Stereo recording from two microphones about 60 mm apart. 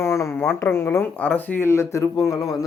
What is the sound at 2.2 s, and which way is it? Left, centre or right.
Speech, left.